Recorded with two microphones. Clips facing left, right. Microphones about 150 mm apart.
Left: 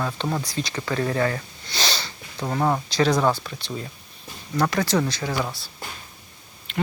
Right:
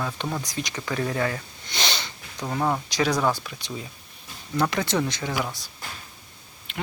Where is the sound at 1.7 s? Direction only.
20° right (ahead or behind).